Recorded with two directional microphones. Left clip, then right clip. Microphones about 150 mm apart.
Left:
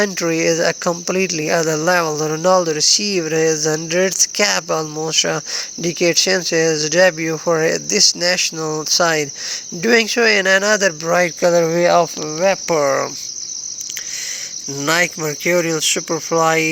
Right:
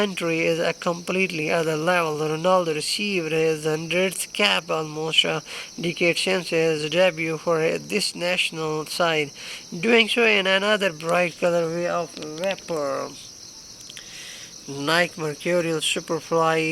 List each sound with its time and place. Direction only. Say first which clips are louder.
0.0 s speech: left 6 dB; 20° left (ahead or behind)
11.9 s speech: left 12 dB; 60° left (ahead or behind)
12.7 s cricket: left 10 dB; 45° left (ahead or behind)
14.8 s speech: left 5 dB; 25° left (ahead or behind)